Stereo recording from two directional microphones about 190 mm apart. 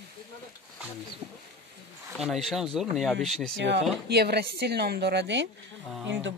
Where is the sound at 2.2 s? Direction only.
Centre (ahead or behind).